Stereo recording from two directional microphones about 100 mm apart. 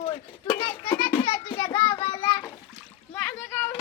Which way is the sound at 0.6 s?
55° left (ahead or behind).